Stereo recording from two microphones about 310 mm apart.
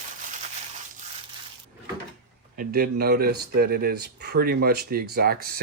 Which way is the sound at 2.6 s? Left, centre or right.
Right.